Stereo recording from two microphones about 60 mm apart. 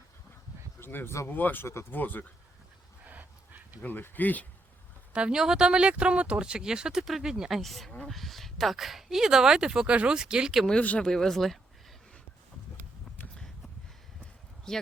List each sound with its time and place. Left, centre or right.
0.8 s speech: left
1.6 s speech: left
1.9 s speech: left
3.1 s a sound: right
3.8 s speech: left
5.1 s speech: centre
7.6 s speech: centre
10.8 s speech: left
11.0 s speech: centre
14.7 s speech: centre